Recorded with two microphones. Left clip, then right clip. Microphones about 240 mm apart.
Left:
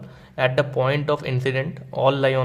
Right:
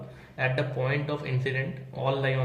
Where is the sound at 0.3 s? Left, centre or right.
Left.